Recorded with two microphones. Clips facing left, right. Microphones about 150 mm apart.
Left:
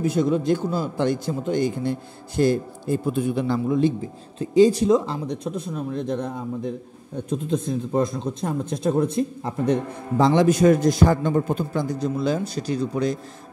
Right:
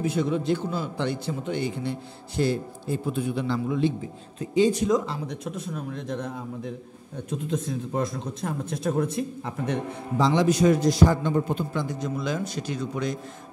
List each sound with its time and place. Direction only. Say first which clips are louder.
0.0 s a man's voice: left 4 dB; 40° left (ahead or behind)
10.1 s a man's voice: left 4 dB; 55° left (ahead or behind); by 13.2 s 35° left (ahead or behind)